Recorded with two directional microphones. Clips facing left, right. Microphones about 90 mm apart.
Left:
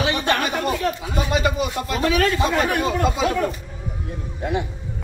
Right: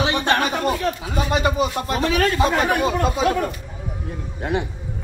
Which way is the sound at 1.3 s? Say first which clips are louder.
Right 2 dB; 30° right (ahead or behind).